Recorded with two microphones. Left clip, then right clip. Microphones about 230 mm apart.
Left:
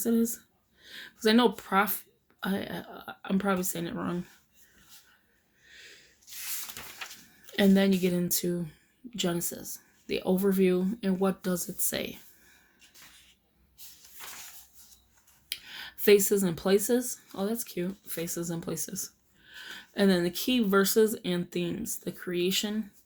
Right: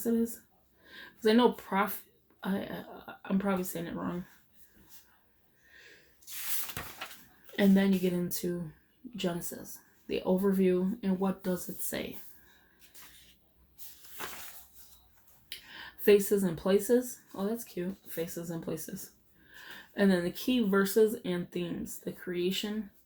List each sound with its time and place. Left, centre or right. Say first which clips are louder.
0.0 s speech: left 3 dB; left
6.3 s a sound: even; centre
7.5 s speech: left 3 dB; left
15.4 s speech: left 5 dB; left